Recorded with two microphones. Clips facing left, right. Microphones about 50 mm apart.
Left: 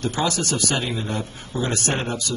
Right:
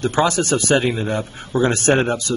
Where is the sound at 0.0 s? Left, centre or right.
Right.